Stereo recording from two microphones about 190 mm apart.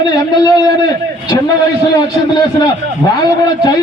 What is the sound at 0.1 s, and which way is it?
Speech, 20° left (ahead or behind).